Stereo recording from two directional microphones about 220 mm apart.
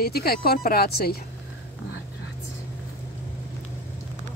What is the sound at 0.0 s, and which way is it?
Speech, 45° left (ahead or behind).